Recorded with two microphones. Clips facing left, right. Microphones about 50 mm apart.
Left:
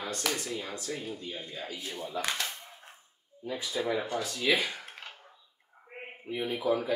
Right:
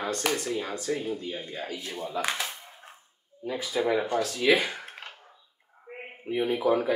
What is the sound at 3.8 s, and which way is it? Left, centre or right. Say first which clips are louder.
Speech: right 6 dB; right.